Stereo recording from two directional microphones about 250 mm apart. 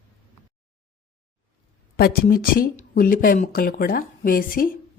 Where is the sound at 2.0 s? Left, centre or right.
Left.